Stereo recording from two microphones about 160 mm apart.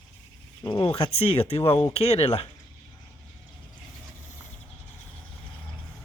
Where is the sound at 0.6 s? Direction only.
30° left (ahead or behind).